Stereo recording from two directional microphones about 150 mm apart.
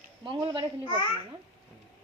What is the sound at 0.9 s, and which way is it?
Babbling, 35° left (ahead or behind).